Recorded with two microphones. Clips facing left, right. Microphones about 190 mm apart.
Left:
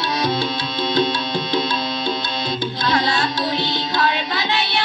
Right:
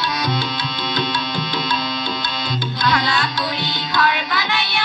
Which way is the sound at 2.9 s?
25° left (ahead or behind).